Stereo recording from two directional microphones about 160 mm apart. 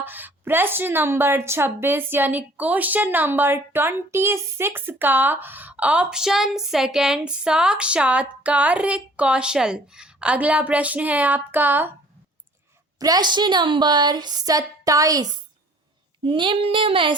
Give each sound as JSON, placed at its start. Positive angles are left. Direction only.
{"t": 0.0, "sound": "a woman's voice", "side_deg": -10}
{"t": 13.0, "sound": "a woman's voice", "side_deg": -25}
{"t": 16.2, "sound": "speech", "side_deg": -30}